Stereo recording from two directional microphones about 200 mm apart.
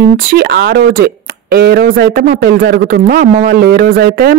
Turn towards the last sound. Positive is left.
turn(degrees=-50)  # may be behind; listen again after turning